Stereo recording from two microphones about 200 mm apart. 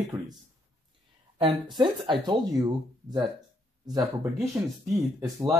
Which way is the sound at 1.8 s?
25° right (ahead or behind).